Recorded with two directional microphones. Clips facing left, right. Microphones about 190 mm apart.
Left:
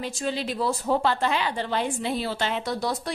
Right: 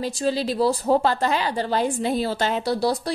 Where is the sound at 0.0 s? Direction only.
35° right (ahead or behind).